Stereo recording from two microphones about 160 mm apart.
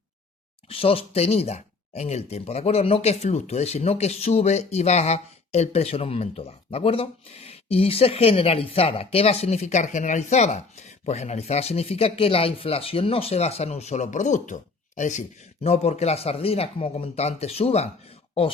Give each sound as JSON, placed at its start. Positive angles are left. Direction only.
{"t": 0.7, "sound": "speech", "side_deg": 35}